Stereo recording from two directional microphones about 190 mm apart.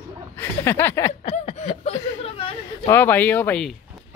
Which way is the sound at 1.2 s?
30° left (ahead or behind).